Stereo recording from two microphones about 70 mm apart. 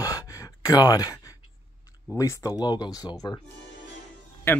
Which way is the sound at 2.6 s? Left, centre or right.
Left.